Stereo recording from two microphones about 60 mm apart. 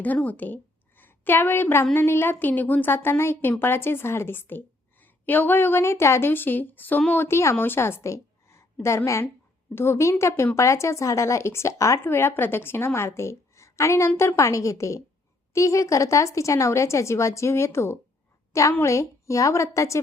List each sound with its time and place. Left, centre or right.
0.0 s a woman's voice: left
7.1 s a woman's voice: left
12.0 s a woman's voice: left
18.8 s a woman's voice: left